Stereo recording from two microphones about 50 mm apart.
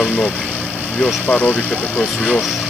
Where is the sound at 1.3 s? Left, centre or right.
Left.